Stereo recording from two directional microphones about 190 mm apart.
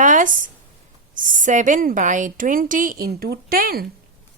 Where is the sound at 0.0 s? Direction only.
40° right (ahead or behind).